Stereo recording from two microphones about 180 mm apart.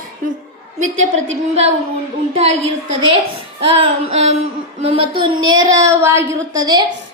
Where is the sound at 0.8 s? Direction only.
40° right (ahead or behind).